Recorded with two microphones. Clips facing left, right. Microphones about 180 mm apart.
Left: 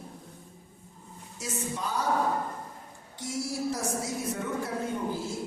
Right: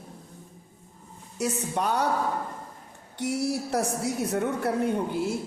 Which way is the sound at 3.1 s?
65° right (ahead or behind).